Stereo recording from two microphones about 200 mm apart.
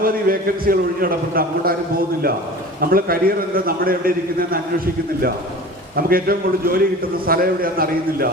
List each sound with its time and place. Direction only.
0.0 s a man's voice: 45° right (ahead or behind)
2.8 s a man's voice: 45° right (ahead or behind)
6.0 s a man's voice: 45° right (ahead or behind)